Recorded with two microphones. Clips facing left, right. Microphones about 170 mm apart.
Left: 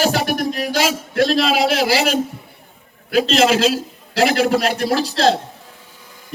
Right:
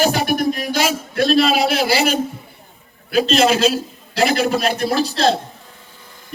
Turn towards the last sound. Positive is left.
turn(degrees=90)